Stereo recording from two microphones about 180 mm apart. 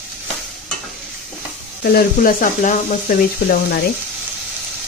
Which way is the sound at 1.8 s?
60° left (ahead or behind).